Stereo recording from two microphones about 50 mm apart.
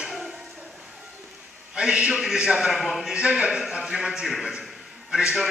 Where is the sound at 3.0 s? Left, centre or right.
Centre.